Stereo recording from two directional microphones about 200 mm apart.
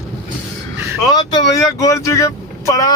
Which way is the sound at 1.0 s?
20° left (ahead or behind).